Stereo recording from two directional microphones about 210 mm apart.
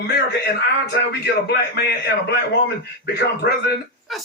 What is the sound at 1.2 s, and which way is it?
A man's voice, 50° left (ahead or behind).